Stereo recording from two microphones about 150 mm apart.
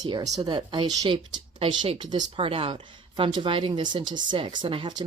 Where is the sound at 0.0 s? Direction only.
30° right (ahead or behind).